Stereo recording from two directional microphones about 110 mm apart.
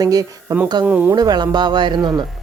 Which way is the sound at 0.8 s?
15° right (ahead or behind).